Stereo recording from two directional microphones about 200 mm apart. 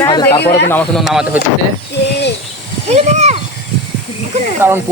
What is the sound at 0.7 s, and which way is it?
Speech, 10° left (ahead or behind).